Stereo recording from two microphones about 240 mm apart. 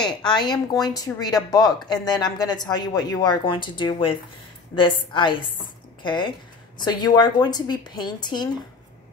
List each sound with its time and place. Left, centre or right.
0.0 s a woman's voice: centre